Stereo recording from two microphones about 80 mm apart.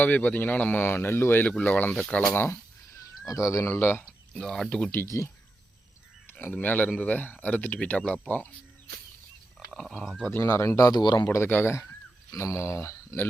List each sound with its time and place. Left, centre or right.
0.0 s speech: left
2.3 s speech: left
2.9 s speech: left
4.0 s speech: centre
5.0 s speech: left
6.6 s speech: left
9.8 s speech: centre
10.4 s speech: left
11.0 s speech: left
11.3 s speech: left